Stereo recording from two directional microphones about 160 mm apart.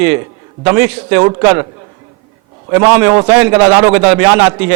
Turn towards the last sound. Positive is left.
turn(degrees=-10)  # may be behind; listen again after turning